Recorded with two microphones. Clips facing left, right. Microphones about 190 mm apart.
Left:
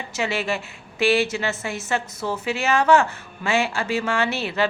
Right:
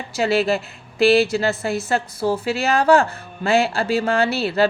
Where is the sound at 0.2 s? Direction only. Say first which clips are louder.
Right 7 dB; 35° right (ahead or behind).